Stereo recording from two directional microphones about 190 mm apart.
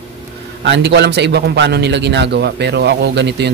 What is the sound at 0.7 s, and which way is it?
A man's voice, 65° right (ahead or behind).